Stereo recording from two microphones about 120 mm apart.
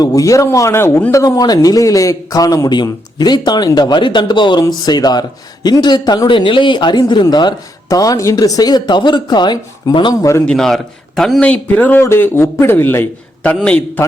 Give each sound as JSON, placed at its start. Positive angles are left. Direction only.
{"t": 0.0, "sound": "a man's voice", "side_deg": 30}
{"t": 10.4, "sound": "a man's voice", "side_deg": 5}